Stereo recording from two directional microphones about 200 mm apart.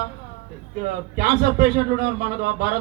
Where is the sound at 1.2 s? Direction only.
45° right (ahead or behind).